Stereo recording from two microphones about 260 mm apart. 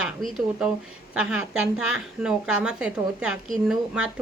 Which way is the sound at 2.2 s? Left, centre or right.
Centre.